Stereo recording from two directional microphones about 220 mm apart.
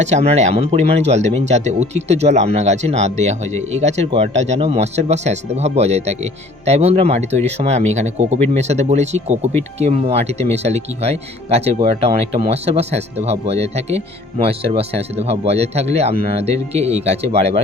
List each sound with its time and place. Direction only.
0.0 s speech: 30° right (ahead or behind)